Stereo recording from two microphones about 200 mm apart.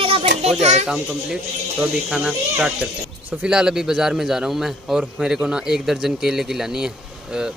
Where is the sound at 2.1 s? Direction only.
5° right (ahead or behind).